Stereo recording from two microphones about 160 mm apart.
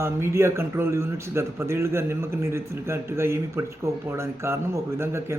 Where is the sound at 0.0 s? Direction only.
15° right (ahead or behind).